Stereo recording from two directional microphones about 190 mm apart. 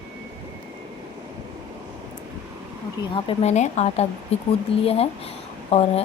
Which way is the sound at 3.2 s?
35° left (ahead or behind).